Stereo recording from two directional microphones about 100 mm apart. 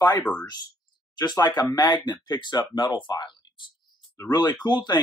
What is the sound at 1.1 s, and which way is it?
Speech, 45° left (ahead or behind).